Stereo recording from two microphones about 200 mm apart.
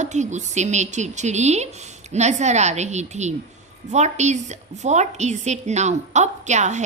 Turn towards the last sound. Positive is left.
turn(degrees=-35)  # may be behind; listen again after turning